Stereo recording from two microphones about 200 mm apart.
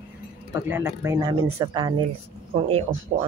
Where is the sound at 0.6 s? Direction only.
10° right (ahead or behind).